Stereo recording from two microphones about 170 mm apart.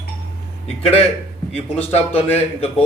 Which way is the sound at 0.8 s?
35° left (ahead or behind).